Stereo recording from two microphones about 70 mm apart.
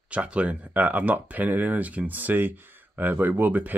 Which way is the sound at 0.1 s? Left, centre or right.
Centre.